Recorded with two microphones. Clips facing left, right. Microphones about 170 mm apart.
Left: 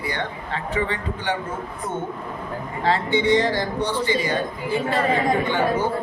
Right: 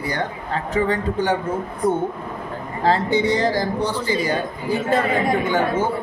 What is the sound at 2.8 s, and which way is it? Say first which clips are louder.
Speech: right 3 dB; 40° right (ahead or behind).